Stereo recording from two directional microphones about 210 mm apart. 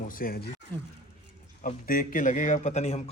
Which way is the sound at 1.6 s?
40° left (ahead or behind).